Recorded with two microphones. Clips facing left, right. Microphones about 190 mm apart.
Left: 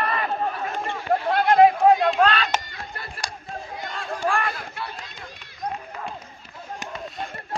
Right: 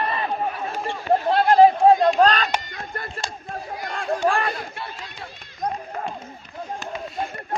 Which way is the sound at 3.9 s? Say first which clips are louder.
Right 5 dB; 45° right (ahead or behind).